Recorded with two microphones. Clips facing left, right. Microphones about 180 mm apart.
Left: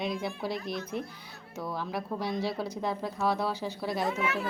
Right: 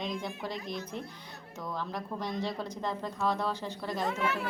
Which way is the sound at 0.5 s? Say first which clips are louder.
Left 3 dB; 15° right (ahead or behind).